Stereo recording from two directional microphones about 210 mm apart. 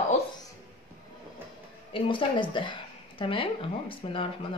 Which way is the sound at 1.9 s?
25° left (ahead or behind).